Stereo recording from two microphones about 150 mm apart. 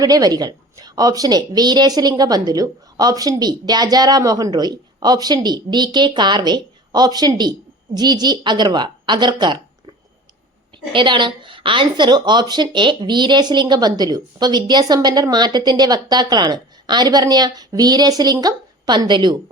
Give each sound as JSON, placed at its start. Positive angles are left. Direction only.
{"t": 0.0, "sound": "speech", "side_deg": -25}
{"t": 10.9, "sound": "speech", "side_deg": -30}